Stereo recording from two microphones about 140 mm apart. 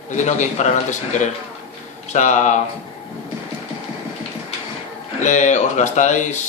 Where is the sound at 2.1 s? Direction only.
60° left (ahead or behind).